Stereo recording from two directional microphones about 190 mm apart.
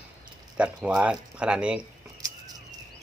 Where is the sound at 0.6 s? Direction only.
5° right (ahead or behind).